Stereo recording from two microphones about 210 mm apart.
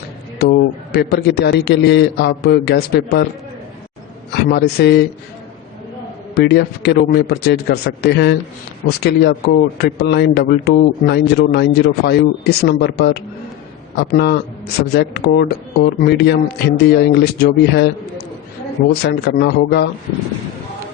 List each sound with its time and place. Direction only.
0.3 s a man's voice: 55° left (ahead or behind)
4.4 s a man's voice: 50° left (ahead or behind)
6.3 s a man's voice: 50° left (ahead or behind)
19.0 s a man's voice: 50° left (ahead or behind)